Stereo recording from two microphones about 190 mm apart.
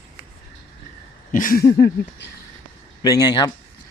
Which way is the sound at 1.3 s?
45° left (ahead or behind).